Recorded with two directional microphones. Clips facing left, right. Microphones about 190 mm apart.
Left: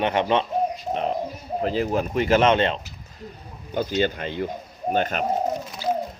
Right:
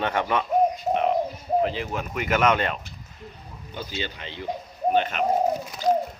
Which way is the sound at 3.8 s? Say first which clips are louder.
Left 10 dB; 50° left (ahead or behind).